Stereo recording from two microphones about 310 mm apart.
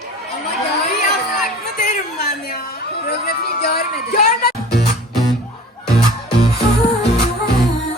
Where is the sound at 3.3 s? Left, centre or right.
Left.